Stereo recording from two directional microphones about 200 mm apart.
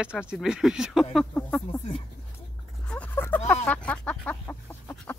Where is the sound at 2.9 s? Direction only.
10° left (ahead or behind).